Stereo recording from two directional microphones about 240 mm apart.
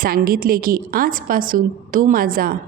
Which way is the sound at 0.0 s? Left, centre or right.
Right.